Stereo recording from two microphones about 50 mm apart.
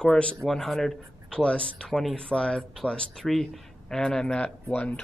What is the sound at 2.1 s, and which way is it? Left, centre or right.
Speech, left.